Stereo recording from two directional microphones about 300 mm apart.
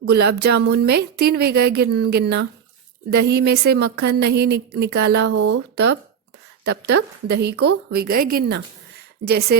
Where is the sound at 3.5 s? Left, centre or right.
Right.